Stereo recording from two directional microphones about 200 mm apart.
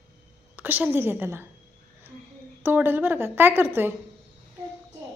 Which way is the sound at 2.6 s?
10° right (ahead or behind).